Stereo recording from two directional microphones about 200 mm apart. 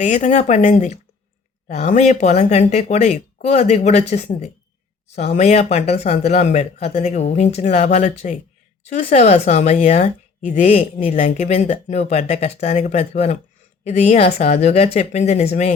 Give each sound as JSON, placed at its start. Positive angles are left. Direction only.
{"t": 0.0, "sound": "speech", "side_deg": 35}